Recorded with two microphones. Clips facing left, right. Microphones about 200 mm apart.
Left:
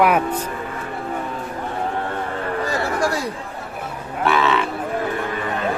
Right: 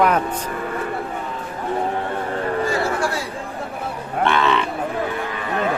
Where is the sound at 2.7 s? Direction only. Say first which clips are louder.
Even; 40° left (ahead or behind).